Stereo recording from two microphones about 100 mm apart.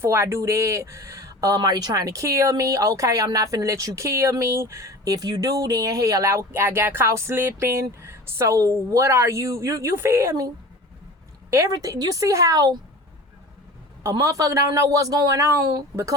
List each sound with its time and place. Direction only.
0.0 s speech: 25° right (ahead or behind)
11.5 s speech: 30° right (ahead or behind)
14.0 s speech: 30° right (ahead or behind)